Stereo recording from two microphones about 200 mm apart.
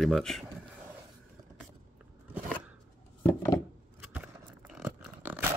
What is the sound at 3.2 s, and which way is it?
Chopping, 15° left (ahead or behind).